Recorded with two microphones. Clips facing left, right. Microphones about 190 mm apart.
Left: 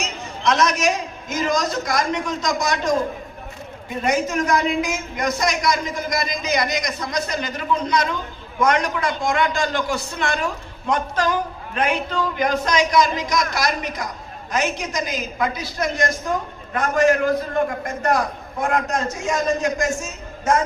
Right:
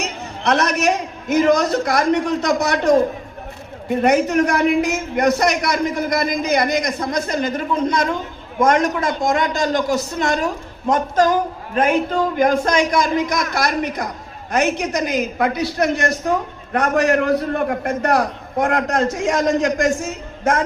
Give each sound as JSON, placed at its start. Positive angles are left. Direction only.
{"t": 0.0, "sound": "a man's voice", "side_deg": -60}